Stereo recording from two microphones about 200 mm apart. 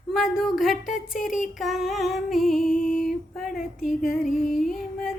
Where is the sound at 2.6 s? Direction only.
45° left (ahead or behind).